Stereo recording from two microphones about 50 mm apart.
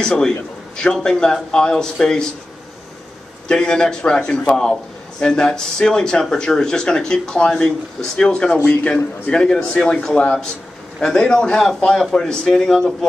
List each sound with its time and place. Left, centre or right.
0.0 s speech: centre
3.4 s speech: centre
8.6 s a man's voice: left
9.3 s a man's voice: centre